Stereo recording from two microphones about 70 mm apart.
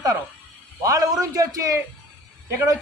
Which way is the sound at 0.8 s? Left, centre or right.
Right.